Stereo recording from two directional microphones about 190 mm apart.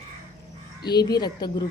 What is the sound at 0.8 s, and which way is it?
Speech, 20° left (ahead or behind).